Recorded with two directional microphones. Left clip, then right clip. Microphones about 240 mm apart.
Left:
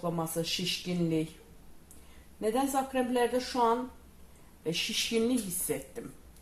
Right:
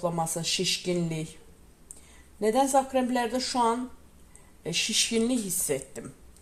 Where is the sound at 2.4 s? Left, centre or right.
Right.